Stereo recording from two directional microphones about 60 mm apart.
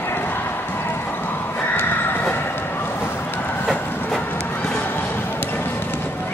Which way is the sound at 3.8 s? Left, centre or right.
Left.